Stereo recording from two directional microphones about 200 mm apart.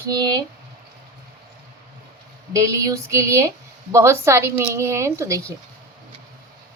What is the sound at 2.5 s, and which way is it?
A woman's voice, 15° right (ahead or behind).